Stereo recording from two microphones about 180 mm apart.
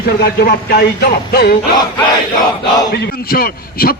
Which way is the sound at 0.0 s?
60° left (ahead or behind).